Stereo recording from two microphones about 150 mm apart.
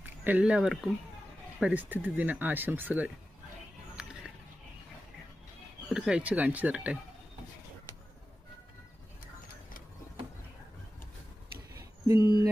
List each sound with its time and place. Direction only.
0.0 s speech: 10° right (ahead or behind)
4.0 s a sound: 5° right (ahead or behind)
5.9 s speech: 5° right (ahead or behind)
12.0 s speech: 20° right (ahead or behind)